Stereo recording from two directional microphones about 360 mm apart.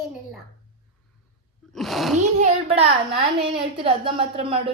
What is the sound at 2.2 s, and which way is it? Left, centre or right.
A woman's voice, centre.